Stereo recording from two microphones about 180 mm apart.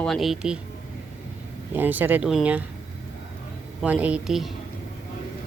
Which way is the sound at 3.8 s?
10° right (ahead or behind).